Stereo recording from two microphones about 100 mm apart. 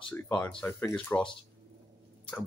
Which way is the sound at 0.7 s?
20° left (ahead or behind).